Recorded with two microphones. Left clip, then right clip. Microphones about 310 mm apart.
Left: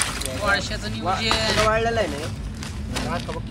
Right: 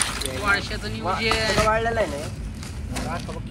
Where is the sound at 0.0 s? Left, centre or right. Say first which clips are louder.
Left 1 dB; centre.